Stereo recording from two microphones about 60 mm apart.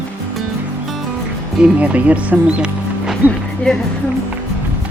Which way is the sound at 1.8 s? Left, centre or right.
Right.